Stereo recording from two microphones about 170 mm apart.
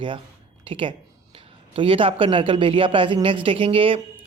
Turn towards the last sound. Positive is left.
turn(degrees=-30)  # may be behind; listen again after turning